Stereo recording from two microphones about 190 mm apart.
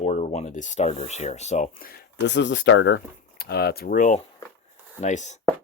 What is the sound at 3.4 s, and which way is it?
Speech, 55° left (ahead or behind).